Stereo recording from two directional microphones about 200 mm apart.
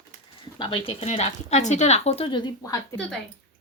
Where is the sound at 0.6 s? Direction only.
25° left (ahead or behind).